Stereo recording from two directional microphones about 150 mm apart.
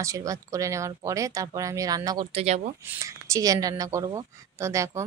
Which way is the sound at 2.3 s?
45° right (ahead or behind).